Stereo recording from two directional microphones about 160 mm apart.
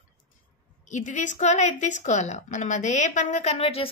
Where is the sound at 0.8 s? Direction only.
50° left (ahead or behind).